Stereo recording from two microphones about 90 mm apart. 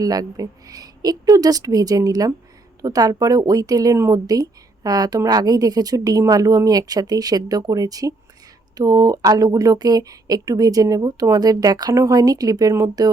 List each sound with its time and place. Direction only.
0.0 s speech: 45° right (ahead or behind)